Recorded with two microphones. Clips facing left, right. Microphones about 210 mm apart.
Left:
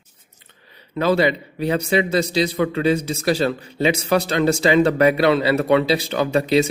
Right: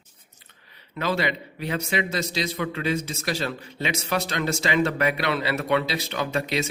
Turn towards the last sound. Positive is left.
turn(degrees=35)  # may be behind; listen again after turning